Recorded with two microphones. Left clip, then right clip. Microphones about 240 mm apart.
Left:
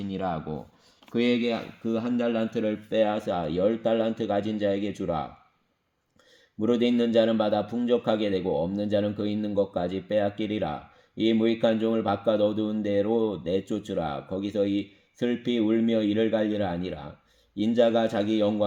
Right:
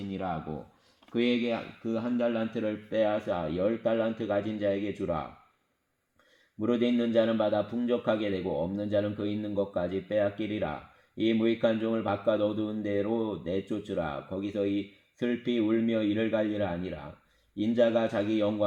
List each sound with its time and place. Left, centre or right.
0.1 s speech: left
6.6 s speech: left